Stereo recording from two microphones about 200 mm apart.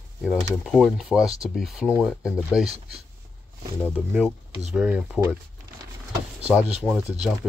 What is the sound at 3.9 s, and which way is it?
Speech, 5° right (ahead or behind).